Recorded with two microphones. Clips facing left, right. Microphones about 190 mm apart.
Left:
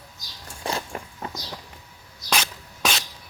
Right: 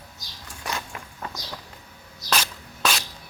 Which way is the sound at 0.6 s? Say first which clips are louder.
Left 4 dB; 35° left (ahead or behind).